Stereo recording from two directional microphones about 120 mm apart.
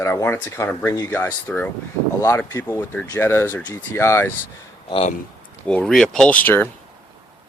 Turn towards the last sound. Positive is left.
turn(degrees=15)  # may be behind; listen again after turning